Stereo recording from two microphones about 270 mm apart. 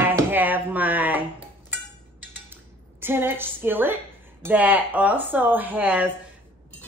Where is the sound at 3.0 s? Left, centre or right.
Centre.